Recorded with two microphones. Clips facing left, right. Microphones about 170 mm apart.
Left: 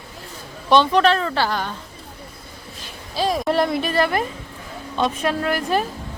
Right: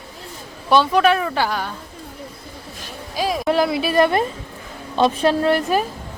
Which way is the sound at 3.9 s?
20° right (ahead or behind).